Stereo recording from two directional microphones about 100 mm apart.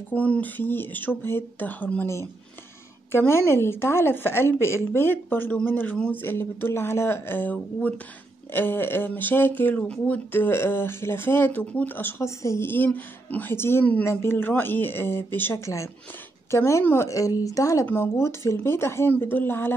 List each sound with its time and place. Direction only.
0.1 s speech: 15° left (ahead or behind)
3.1 s a woman's voice: 25° left (ahead or behind)
17.8 s speech: 20° left (ahead or behind)